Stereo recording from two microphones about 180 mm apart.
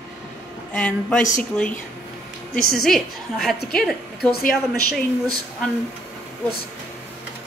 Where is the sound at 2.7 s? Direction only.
Centre (ahead or behind).